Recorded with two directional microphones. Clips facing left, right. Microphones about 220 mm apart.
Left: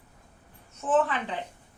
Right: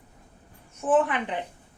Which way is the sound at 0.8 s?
15° right (ahead or behind).